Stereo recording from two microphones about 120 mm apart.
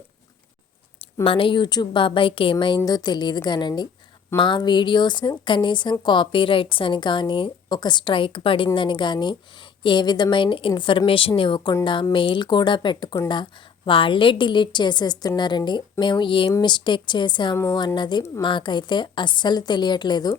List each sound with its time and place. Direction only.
1.2 s speech: 50° left (ahead or behind)